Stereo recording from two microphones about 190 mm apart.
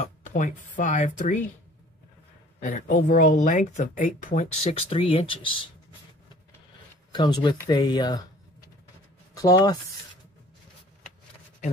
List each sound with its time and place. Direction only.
0.0 s speech: 40° left (ahead or behind)
2.6 s speech: 45° left (ahead or behind); by 5.6 s 25° left (ahead or behind)
7.1 s speech: 20° left (ahead or behind)
9.3 s speech: 20° left (ahead or behind)